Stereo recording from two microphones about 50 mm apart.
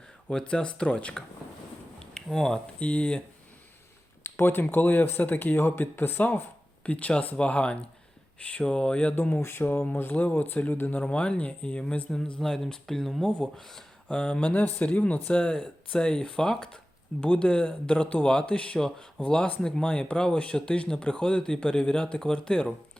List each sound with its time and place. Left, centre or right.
0.3 s speech: centre
2.0 s a sound: centre
2.7 s speech: left
4.2 s a sound: left
4.7 s speech: left
6.8 s speech: left
9.4 s speech: left
9.9 s speech: left
11.0 s speech: left
12.1 s speech: centre
14.1 s speech: left
18.8 s speech: centre
19.8 s speech: left